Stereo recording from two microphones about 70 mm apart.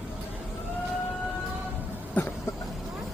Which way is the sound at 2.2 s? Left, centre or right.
Left.